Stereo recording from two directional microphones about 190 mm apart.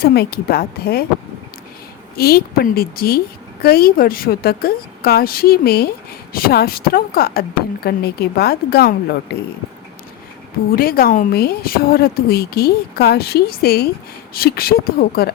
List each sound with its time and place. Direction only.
0.0 s a woman's voice: 55° left (ahead or behind)
2.1 s a woman's voice: 55° left (ahead or behind)
10.7 s a woman's voice: 50° left (ahead or behind)